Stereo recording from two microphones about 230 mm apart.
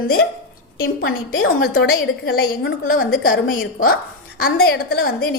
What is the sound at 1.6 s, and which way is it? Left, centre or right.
A woman's voice, left.